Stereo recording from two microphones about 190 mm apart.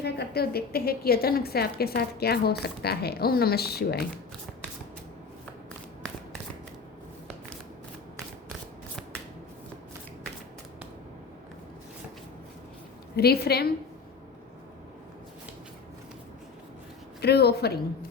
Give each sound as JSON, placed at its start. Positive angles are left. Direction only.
{"t": 0.0, "sound": "a woman's voice", "side_deg": 55}
{"t": 13.1, "sound": "a woman's voice", "side_deg": 55}
{"t": 17.2, "sound": "a woman's voice", "side_deg": 60}